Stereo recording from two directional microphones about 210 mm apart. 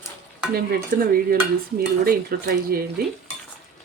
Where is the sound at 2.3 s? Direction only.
45° right (ahead or behind).